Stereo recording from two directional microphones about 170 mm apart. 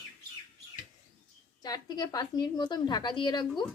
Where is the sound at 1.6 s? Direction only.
25° left (ahead or behind).